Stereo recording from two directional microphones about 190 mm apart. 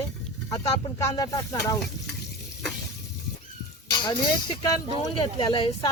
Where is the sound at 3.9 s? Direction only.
20° left (ahead or behind).